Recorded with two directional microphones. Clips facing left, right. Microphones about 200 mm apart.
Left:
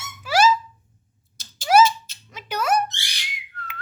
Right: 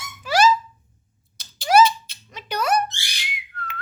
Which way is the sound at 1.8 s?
45° left (ahead or behind).